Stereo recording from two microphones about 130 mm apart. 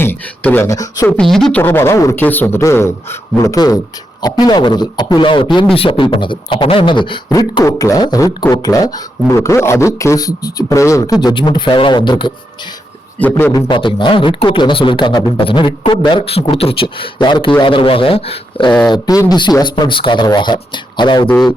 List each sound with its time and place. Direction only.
0.0 s speech: 15° left (ahead or behind)
0.7 s a man's voice: 30° left (ahead or behind)
1.2 s speech: 5° left (ahead or behind)
1.6 s a man's voice: 20° left (ahead or behind); by 7.2 s 40° left (ahead or behind)
7.3 s a man's voice: 25° left (ahead or behind)
13.1 s a man's voice: 15° left (ahead or behind)
13.5 s a man's voice: 30° left (ahead or behind)
18.9 s a man's voice: 30° left (ahead or behind)